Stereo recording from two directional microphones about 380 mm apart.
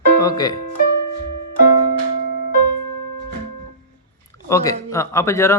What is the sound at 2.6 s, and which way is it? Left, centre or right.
Music, left.